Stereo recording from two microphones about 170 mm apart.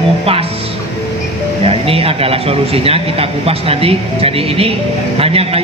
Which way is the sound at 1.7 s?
35° right (ahead or behind).